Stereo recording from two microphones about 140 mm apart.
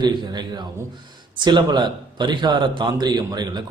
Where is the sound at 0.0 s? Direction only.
30° right (ahead or behind).